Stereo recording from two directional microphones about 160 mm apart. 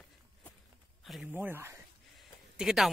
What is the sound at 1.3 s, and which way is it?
Speech, 15° right (ahead or behind).